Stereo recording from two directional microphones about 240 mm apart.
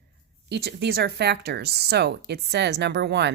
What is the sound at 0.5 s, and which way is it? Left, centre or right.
Speech, right.